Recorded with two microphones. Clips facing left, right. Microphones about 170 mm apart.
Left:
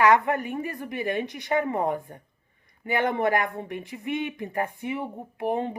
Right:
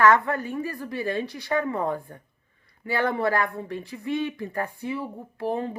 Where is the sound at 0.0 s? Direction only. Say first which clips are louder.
Even; 20° left (ahead or behind).